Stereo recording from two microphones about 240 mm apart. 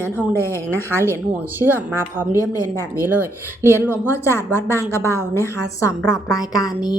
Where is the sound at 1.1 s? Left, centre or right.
Centre.